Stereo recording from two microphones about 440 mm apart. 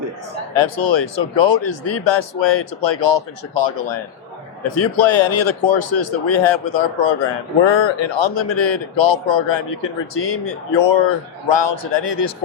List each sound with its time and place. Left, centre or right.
0.5 s a man's voice: left
4.9 s a man's voice: left
6.7 s a man's voice: left